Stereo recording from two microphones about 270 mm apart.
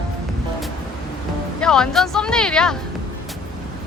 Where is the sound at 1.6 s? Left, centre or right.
Centre.